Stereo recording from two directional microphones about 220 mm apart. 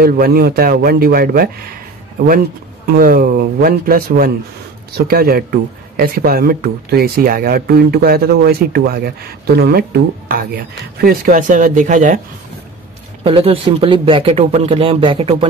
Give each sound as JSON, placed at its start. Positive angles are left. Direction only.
{"t": 0.0, "sound": "speech", "side_deg": -45}
{"t": 2.9, "sound": "speech", "side_deg": -40}
{"t": 13.2, "sound": "speech", "side_deg": -25}